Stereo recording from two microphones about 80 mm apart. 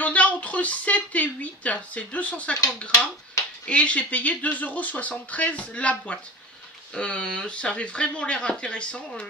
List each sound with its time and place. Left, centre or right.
0.0 s speech: centre
3.6 s speech: centre